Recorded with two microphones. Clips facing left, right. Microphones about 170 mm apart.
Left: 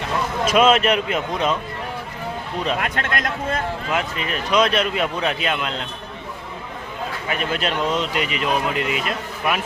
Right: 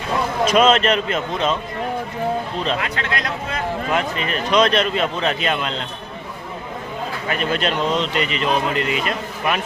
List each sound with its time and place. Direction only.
0.4 s speech: 5° left (ahead or behind)
2.9 s speech: 50° left (ahead or behind)
3.9 s speech: 5° left (ahead or behind)
7.3 s speech: 5° left (ahead or behind)